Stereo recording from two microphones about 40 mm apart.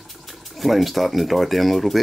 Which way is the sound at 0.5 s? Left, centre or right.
Centre.